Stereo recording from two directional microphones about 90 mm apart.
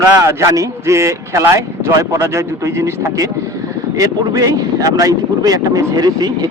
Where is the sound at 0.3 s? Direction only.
40° right (ahead or behind).